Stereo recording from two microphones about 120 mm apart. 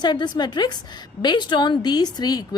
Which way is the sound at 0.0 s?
35° left (ahead or behind).